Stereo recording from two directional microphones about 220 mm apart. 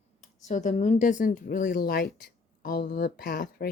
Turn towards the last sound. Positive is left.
turn(degrees=45)  # may be behind; listen again after turning